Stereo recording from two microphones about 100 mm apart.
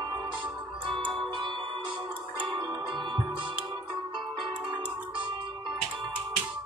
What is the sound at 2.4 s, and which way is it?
Music, 45° right (ahead or behind).